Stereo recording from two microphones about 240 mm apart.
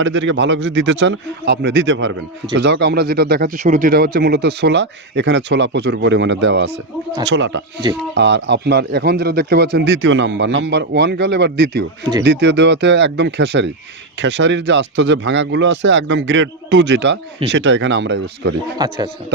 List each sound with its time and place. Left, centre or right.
0.0 s speech: right
18.8 s speech: centre